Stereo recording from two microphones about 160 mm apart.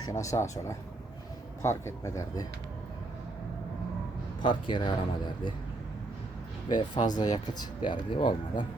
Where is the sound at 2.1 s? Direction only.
20° left (ahead or behind).